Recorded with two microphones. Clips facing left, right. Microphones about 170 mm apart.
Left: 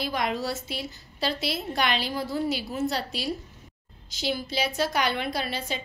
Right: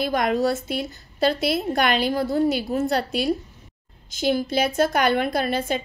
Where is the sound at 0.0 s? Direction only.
50° right (ahead or behind).